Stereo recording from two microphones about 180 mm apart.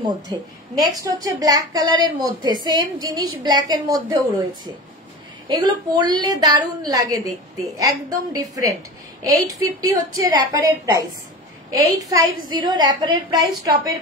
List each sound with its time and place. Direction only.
0.0 s a woman's voice: 20° right (ahead or behind)
5.5 s a woman's voice: 25° right (ahead or behind)